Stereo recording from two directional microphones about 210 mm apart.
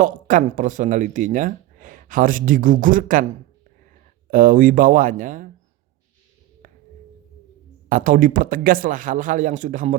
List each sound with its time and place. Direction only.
0.0 s speech: 40° right (ahead or behind)
4.3 s speech: 40° right (ahead or behind)
7.9 s speech: 40° right (ahead or behind)